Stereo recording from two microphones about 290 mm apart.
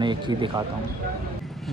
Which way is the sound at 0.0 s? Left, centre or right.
Centre.